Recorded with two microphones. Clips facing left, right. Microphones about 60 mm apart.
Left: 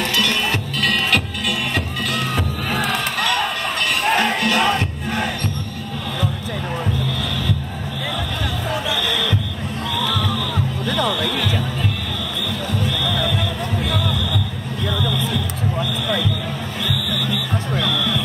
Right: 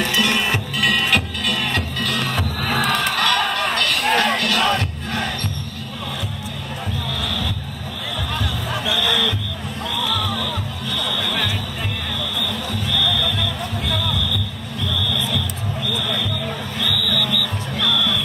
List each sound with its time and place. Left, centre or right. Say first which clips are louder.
0.0 s music: right 1 dB; right
0.7 s music: right 1 dB; centre
3.3 s music: right 1 dB; centre
4.0 s music: left 1 dB; centre
4.5 s crowd: left 1 dB; centre
8.8 s music: right 5 dB; left
12.9 s music: even; left
14.9 s a sound: left 2 dB; left
16.8 s smoke detector: right 2 dB; centre